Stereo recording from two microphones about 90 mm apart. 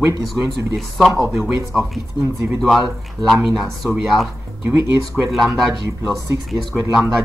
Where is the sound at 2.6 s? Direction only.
Centre (ahead or behind).